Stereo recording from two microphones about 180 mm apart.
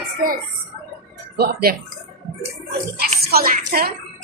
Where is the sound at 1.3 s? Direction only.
60° right (ahead or behind).